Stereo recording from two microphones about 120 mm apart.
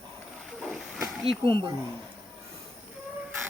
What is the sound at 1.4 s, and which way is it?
Speech, 45° right (ahead or behind).